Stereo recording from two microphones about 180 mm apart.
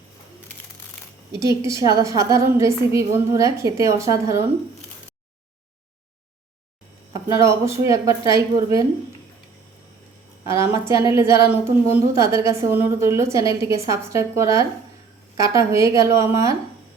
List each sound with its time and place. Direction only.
1.3 s a woman's voice: 15° right (ahead or behind)
7.1 s a woman's voice: 15° right (ahead or behind)
10.4 s a woman's voice: 15° right (ahead or behind)